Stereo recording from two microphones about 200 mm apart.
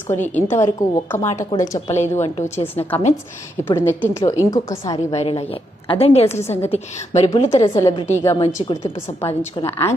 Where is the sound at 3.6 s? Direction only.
10° left (ahead or behind).